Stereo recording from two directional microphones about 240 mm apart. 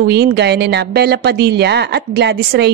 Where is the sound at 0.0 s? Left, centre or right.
Right.